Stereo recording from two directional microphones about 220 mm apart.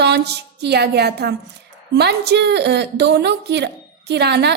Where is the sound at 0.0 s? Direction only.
50° right (ahead or behind).